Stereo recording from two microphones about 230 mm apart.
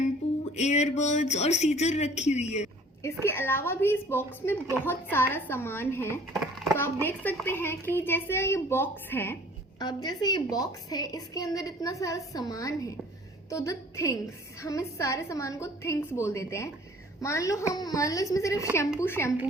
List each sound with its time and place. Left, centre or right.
0.5 s speech: left
3.0 s speech: centre